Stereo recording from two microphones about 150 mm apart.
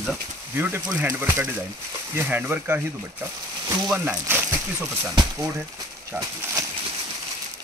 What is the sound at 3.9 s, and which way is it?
Speech, 10° right (ahead or behind).